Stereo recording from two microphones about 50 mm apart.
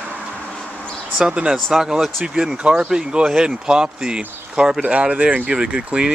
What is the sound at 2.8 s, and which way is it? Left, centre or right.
Speech, centre.